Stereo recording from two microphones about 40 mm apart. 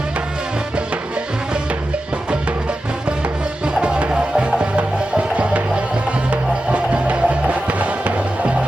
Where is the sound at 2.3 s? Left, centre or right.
Right.